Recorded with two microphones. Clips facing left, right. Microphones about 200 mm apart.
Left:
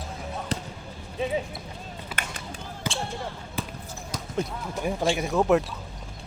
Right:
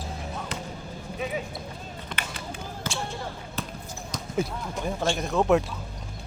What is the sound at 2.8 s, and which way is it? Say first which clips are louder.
Basketball bounce: left 2 dB; 15° left (ahead or behind).